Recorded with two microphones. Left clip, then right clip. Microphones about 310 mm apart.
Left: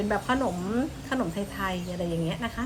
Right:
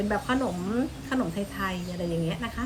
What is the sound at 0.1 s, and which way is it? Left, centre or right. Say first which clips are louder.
A woman's voice: left 2 dB; centre.